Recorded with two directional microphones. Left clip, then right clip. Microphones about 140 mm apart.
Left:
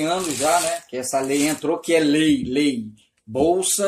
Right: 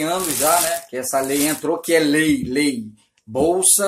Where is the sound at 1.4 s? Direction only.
20° left (ahead or behind).